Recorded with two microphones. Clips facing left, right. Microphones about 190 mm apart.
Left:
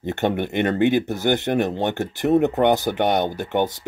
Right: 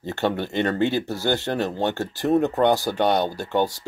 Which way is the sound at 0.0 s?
20° left (ahead or behind).